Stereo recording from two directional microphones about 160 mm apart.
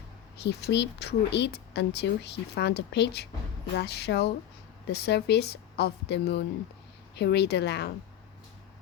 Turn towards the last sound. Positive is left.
turn(degrees=90)